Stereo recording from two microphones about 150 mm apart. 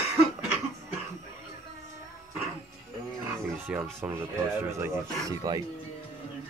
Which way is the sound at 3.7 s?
5° right (ahead or behind).